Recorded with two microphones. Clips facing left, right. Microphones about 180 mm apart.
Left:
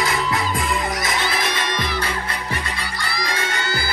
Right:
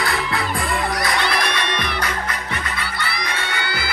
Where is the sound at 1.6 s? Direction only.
60° right (ahead or behind).